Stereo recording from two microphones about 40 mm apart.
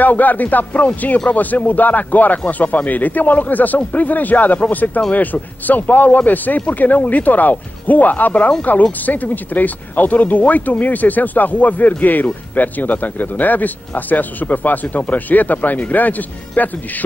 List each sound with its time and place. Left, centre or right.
0.0 s speech: left